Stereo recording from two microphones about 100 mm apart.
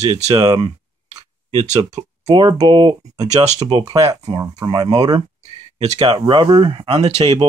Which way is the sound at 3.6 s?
45° right (ahead or behind).